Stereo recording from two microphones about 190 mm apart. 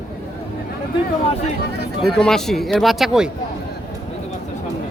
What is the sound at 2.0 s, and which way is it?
Speech, centre (ahead or behind).